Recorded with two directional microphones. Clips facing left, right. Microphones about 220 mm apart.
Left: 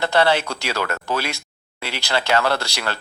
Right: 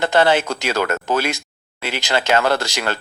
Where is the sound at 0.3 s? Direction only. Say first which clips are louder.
Right 3 dB; 20° right (ahead or behind).